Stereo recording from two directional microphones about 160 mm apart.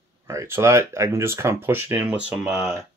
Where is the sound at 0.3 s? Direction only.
20° right (ahead or behind).